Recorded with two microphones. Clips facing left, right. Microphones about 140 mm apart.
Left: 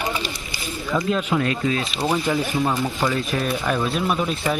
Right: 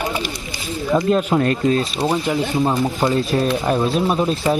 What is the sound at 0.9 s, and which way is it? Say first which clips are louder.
Speech: right 5 dB; 40° right (ahead or behind).